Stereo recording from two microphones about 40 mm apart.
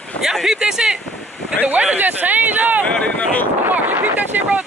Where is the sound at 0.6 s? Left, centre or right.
Centre.